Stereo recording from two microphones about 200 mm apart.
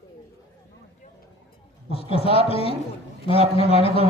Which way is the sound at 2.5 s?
30° left (ahead or behind).